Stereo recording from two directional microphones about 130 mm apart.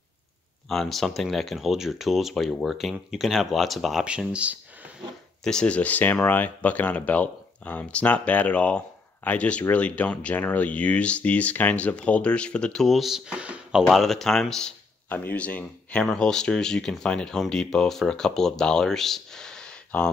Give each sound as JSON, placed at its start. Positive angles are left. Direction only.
{"t": 0.7, "sound": "speech", "side_deg": 0}
{"t": 5.4, "sound": "speech", "side_deg": 5}